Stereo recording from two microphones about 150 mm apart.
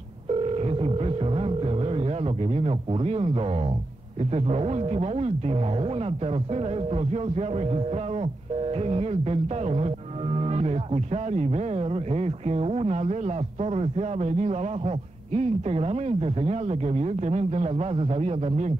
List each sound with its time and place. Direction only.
0.3 s music: 40° right (ahead or behind)
4.2 s speech: 45° right (ahead or behind)